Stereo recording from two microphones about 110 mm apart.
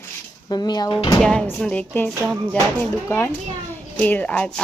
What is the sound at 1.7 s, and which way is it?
Speech, 15° left (ahead or behind).